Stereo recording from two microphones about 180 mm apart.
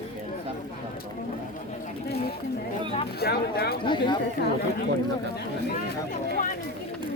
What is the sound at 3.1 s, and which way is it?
Speech, 65° left (ahead or behind).